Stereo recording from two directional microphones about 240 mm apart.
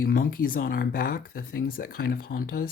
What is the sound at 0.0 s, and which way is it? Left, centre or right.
Speech, left.